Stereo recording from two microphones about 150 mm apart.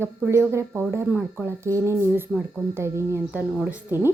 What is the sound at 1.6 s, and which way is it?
A woman's voice, 20° right (ahead or behind).